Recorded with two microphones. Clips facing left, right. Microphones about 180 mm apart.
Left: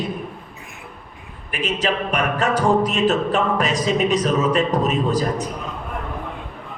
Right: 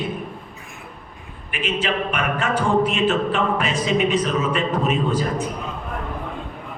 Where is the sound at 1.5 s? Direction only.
40° left (ahead or behind).